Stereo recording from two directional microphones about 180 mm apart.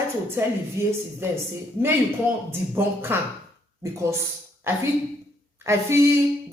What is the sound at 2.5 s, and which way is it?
Speech, 15° right (ahead or behind).